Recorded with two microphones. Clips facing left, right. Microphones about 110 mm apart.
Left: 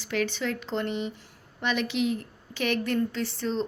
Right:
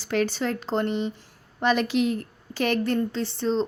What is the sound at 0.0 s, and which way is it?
A woman's voice, 35° right (ahead or behind).